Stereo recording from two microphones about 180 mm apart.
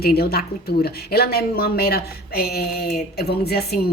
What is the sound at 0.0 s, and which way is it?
A woman's voice, 60° left (ahead or behind).